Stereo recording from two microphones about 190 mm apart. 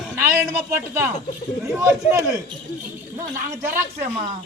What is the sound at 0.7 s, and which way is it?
A man's voice, 10° right (ahead or behind).